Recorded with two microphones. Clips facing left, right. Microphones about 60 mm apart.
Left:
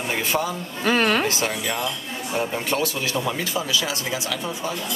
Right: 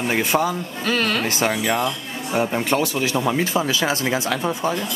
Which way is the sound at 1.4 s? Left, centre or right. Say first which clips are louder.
Right 5 dB; right.